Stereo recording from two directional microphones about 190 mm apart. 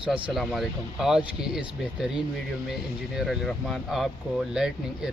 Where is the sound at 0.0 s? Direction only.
5° right (ahead or behind).